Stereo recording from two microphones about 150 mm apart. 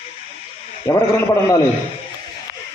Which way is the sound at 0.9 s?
20° left (ahead or behind).